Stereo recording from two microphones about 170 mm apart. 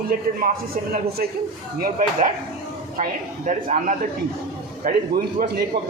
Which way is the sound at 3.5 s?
50° right (ahead or behind).